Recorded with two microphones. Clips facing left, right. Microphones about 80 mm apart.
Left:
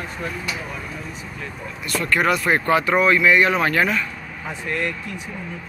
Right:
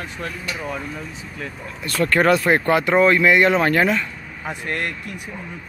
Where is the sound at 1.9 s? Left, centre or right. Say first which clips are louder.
Right 3 dB; right.